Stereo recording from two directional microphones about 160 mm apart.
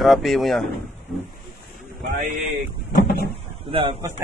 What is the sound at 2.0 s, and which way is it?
Speech, 55° right (ahead or behind).